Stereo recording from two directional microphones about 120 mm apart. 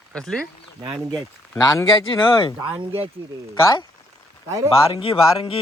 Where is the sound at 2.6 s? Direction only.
45° right (ahead or behind).